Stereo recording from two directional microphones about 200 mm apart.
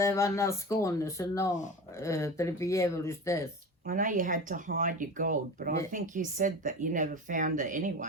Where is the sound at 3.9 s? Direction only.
40° right (ahead or behind).